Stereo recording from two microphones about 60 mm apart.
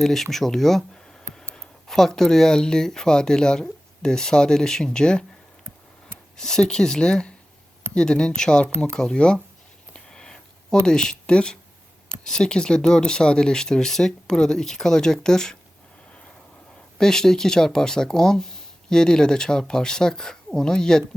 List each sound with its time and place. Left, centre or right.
0.0 s speech: centre
6.3 s speech: centre
9.9 s a sound: centre
10.8 s speech: centre
17.0 s speech: centre